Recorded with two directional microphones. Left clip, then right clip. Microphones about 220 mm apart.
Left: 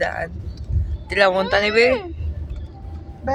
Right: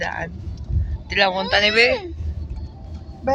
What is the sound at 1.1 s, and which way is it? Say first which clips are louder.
Speech: left 2 dB; 25° left (ahead or behind).